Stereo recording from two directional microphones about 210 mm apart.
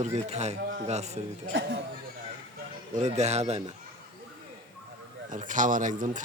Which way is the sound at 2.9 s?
30° right (ahead or behind).